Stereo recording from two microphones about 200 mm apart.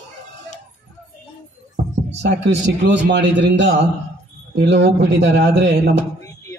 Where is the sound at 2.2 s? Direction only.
60° right (ahead or behind).